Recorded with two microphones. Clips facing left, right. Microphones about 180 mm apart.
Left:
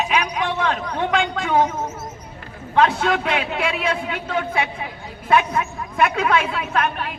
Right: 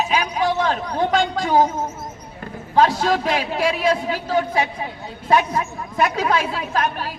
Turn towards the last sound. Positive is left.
turn(degrees=-35)  # may be behind; listen again after turning